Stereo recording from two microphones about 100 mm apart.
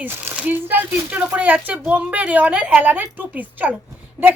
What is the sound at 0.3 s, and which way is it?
A woman's voice, 15° right (ahead or behind).